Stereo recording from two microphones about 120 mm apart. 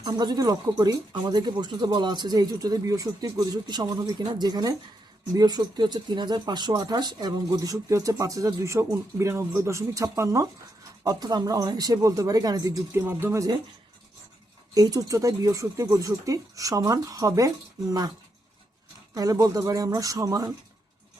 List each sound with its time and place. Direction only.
0.0 s speech: 35° right (ahead or behind); by 13.4 s 20° right (ahead or behind)
14.7 s speech: 30° right (ahead or behind)
19.1 s speech: 30° right (ahead or behind)